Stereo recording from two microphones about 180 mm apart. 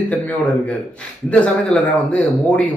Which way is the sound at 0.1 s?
5° left (ahead or behind).